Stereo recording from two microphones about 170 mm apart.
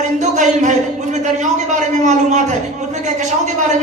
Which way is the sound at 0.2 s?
45° right (ahead or behind).